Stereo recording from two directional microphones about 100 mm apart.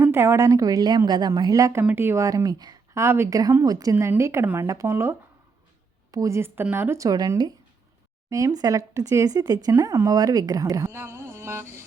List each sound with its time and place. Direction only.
0.0 s speech: 25° right (ahead or behind)
1.8 s speech: 20° right (ahead or behind); by 2.7 s 40° right (ahead or behind)
2.9 s speech: 25° right (ahead or behind)